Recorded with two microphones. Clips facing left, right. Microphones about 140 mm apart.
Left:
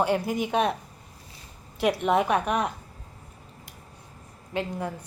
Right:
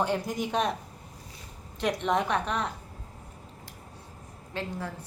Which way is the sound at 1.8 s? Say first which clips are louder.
Left 4 dB; 5° left (ahead or behind).